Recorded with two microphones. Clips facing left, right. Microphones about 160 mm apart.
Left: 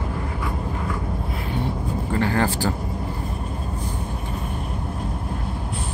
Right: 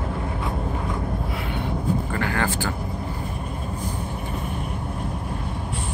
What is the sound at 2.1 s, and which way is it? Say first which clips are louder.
Vehicle: left 3 dB; 30° left (ahead or behind).